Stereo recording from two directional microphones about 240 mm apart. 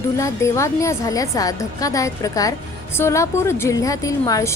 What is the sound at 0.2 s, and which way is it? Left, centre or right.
A woman's voice, centre.